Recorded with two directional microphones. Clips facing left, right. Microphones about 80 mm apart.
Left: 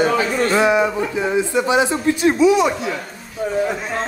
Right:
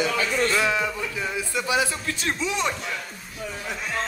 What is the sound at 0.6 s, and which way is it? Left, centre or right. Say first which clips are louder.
A man's voice: left 9 dB; left.